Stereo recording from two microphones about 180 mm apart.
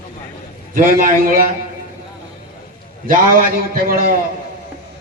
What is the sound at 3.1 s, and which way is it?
A man's voice, 50° right (ahead or behind).